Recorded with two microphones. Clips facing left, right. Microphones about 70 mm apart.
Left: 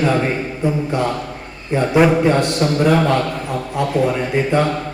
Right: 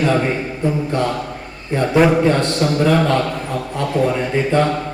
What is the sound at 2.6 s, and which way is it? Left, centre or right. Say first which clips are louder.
Speech: even; centre.